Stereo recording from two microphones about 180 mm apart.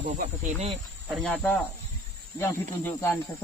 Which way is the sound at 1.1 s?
Centre (ahead or behind).